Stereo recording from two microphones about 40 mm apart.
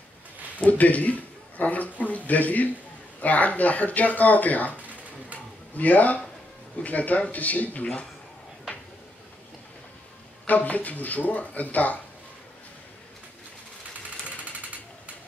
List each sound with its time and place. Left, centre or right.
0.7 s a man's voice: left
5.8 s speech: left
10.4 s speech: left